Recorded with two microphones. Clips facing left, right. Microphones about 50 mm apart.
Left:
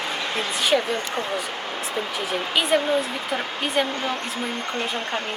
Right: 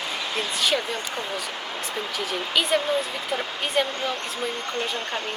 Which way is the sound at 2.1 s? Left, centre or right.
Centre.